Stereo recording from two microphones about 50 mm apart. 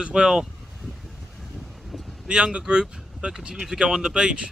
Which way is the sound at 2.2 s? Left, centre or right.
Right.